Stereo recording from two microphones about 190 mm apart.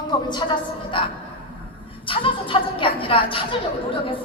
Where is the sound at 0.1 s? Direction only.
20° left (ahead or behind).